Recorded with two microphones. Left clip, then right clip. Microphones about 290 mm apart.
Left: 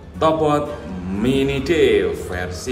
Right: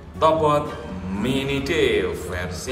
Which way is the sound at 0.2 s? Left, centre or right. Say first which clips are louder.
Left 1 dB; centre.